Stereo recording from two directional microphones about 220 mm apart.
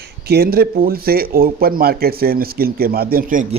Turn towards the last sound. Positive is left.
turn(degrees=-35)  # may be behind; listen again after turning